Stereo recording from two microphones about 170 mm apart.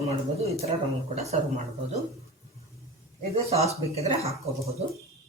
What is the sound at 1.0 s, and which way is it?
Speech, 40° right (ahead or behind).